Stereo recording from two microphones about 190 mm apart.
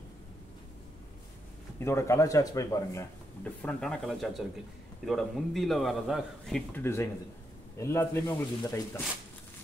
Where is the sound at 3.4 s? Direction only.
5° left (ahead or behind).